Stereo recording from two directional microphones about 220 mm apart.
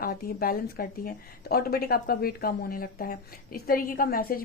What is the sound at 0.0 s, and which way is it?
A woman's voice, 40° left (ahead or behind).